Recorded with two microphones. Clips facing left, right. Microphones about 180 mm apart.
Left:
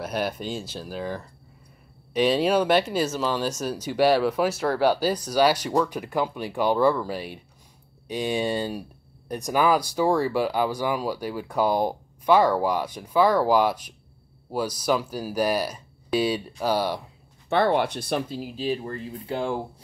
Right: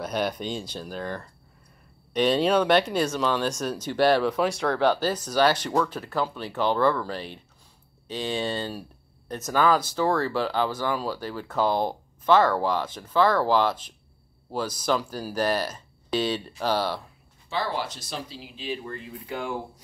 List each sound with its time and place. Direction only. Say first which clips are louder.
0.0 s speech: even; 5° left (ahead or behind)
17.5 s speech: left 8 dB; 55° left (ahead or behind); by 19.5 s 30° left (ahead or behind)